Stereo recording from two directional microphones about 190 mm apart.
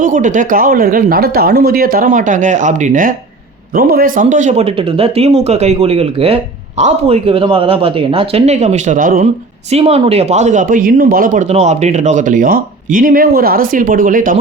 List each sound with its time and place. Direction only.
0.0 s speech: 45° right (ahead or behind)
9.7 s speech: 30° right (ahead or behind)